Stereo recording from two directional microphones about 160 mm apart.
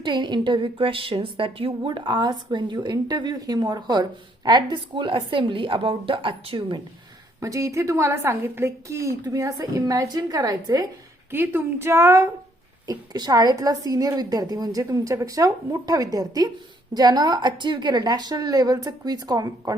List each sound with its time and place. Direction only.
0.0 s a woman's voice: 30° right (ahead or behind)
7.3 s a woman's voice: 20° right (ahead or behind)